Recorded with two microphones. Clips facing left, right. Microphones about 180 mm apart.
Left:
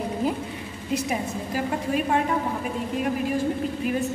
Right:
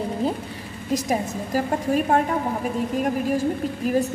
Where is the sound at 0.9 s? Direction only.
40° right (ahead or behind).